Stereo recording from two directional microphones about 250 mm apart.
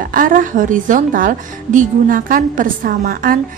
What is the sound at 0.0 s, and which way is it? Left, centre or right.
A woman's voice, right.